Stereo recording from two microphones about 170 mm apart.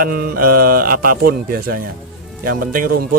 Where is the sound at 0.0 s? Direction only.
60° right (ahead or behind).